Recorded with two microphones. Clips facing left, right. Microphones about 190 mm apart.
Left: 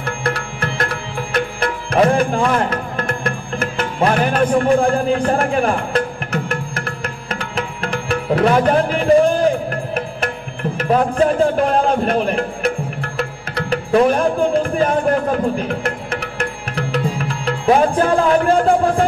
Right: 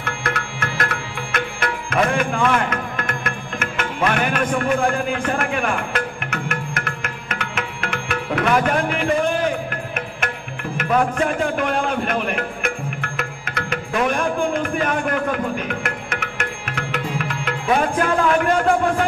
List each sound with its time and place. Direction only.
0.0 s music: 35° left (ahead or behind)